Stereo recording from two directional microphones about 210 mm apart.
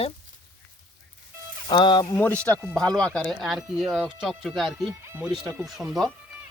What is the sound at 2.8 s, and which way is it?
Speech, 5° left (ahead or behind).